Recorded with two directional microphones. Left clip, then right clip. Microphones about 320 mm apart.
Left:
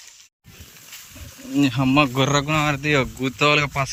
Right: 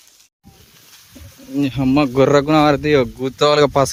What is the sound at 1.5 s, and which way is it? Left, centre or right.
Speech, centre.